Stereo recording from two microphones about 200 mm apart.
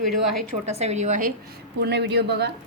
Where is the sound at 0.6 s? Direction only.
35° right (ahead or behind).